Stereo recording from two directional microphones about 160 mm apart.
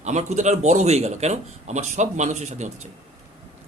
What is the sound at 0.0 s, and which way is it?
A man's voice, 45° right (ahead or behind).